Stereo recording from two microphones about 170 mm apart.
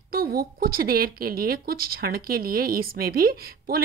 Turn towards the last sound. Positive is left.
turn(degrees=-65)  # may be behind; listen again after turning